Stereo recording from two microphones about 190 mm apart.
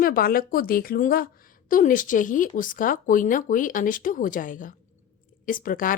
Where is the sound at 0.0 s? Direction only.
50° left (ahead or behind).